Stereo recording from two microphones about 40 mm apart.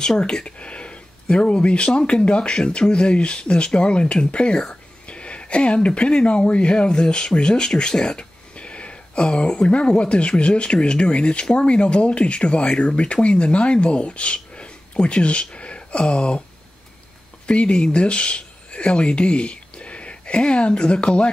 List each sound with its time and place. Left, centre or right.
0.2 s speech: centre
0.6 s a sound: left
1.9 s speech: left
17.5 s speech: left